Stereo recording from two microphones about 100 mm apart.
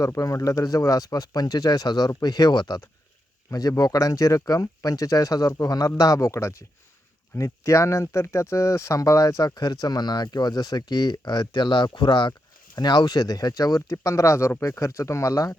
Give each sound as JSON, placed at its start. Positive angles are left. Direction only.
{"t": 0.0, "sound": "speech", "side_deg": 35}